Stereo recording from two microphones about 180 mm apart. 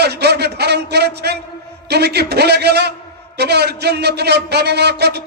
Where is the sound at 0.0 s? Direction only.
65° right (ahead or behind).